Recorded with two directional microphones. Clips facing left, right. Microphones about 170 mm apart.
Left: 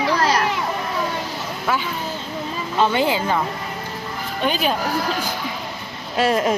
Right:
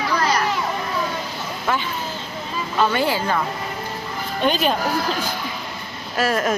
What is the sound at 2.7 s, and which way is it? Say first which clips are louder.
Speech: left 1 dB; 20° left (ahead or behind).